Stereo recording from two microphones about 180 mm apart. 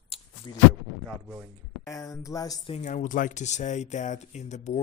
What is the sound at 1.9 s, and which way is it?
Speech, 20° left (ahead or behind).